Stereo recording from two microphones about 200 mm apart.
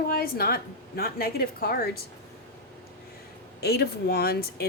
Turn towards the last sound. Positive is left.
turn(degrees=50)  # may be behind; listen again after turning